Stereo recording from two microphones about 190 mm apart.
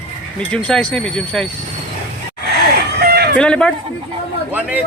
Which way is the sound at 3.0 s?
55° right (ahead or behind).